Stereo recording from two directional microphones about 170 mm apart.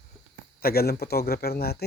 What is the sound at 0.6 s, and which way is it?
A man's voice, 65° left (ahead or behind).